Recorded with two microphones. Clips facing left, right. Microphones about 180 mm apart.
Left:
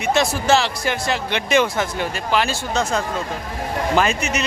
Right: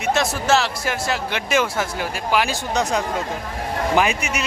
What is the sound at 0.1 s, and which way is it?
A man's voice, centre (ahead or behind).